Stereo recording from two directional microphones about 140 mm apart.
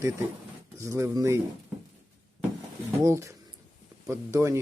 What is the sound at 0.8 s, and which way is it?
Speech, 20° right (ahead or behind).